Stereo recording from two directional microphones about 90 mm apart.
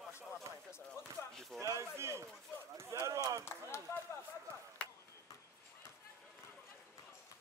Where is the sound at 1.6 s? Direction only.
35° right (ahead or behind).